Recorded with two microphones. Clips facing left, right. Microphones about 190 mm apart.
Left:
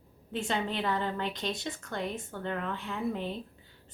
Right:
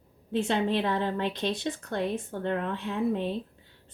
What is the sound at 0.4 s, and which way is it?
A woman's voice, 65° right (ahead or behind).